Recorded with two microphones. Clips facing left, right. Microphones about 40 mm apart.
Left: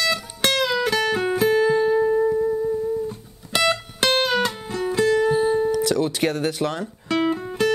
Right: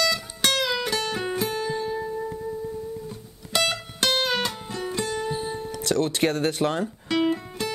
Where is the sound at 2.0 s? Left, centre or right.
Left.